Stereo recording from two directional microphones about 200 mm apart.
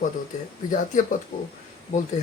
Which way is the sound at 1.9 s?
35° left (ahead or behind).